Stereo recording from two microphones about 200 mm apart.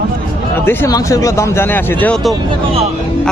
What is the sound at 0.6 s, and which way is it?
A man's voice, 10° left (ahead or behind).